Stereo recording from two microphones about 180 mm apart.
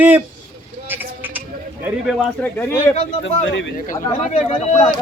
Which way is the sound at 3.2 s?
85° left.